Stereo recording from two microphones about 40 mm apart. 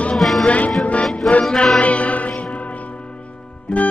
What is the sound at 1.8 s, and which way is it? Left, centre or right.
Music, left.